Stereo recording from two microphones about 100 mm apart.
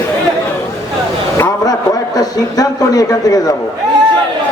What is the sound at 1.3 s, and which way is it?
A man's voice, 35° left (ahead or behind).